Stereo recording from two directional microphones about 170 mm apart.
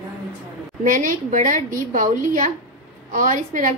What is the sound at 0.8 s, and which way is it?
A woman's voice, 50° right (ahead or behind).